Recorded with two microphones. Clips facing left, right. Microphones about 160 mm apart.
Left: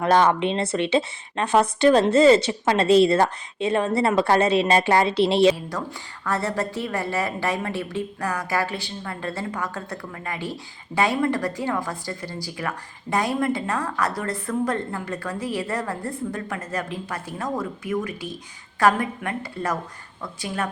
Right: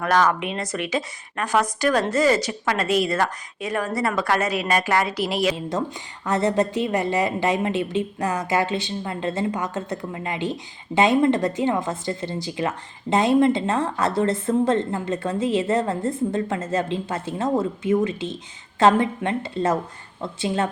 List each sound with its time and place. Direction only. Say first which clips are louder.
0.0 s speech: left 2 dB; 30° left (ahead or behind)
5.5 s a woman's voice: right 5 dB; 25° right (ahead or behind)